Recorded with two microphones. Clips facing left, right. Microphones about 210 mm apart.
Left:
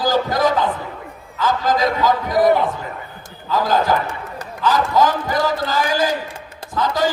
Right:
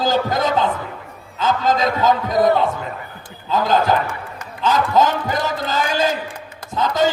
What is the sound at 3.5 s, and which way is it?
A man's voice, 25° right (ahead or behind).